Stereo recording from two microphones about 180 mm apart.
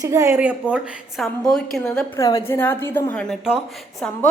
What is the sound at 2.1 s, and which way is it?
A woman's voice, 15° left (ahead or behind).